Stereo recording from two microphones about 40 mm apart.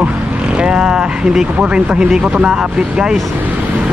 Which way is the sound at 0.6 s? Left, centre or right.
Centre.